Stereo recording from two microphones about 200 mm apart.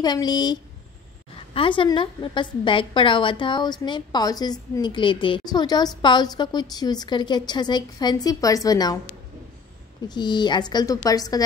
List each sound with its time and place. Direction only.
0.0 s a woman's voice: 20° left (ahead or behind)
10.0 s a woman's voice: 20° left (ahead or behind)